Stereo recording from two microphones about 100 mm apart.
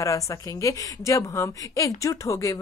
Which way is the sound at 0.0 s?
35° left (ahead or behind).